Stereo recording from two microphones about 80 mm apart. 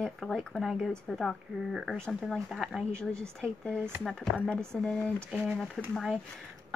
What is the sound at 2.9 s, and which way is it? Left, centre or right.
Speech, centre.